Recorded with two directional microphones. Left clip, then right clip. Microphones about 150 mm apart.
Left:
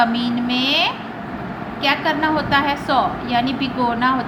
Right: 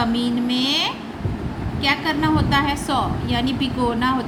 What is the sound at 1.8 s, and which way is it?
A woman's voice, 25° right (ahead or behind).